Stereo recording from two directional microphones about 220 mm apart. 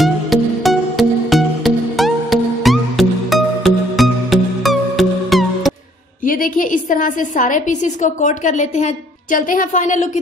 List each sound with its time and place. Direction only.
0.0 s music: centre (ahead or behind)
6.2 s a woman's voice: 40° left (ahead or behind)